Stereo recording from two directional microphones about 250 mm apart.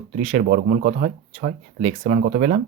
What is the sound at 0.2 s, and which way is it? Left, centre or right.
Speech, right.